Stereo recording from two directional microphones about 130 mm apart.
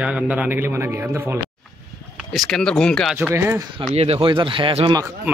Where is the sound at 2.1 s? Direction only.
Centre (ahead or behind).